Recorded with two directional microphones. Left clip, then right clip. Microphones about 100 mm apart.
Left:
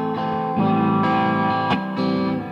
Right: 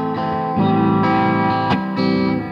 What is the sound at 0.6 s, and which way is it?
Music, 40° right (ahead or behind).